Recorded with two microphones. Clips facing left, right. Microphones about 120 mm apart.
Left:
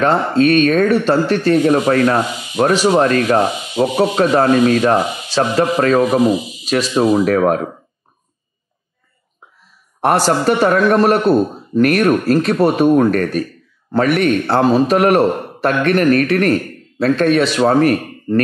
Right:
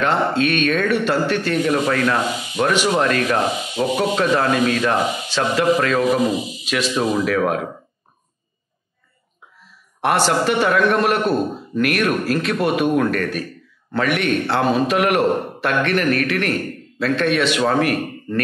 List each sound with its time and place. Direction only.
0.0 s speech: 40° left (ahead or behind)
9.9 s speech: 40° left (ahead or behind)